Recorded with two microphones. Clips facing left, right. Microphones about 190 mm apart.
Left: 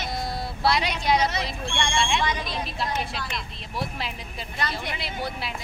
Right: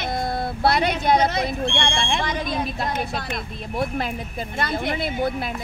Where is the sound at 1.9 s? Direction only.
45° right (ahead or behind).